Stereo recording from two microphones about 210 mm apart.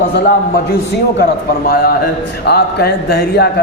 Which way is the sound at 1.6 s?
45° left (ahead or behind).